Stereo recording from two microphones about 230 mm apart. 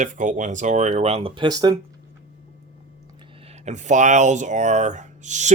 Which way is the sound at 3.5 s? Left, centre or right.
Right.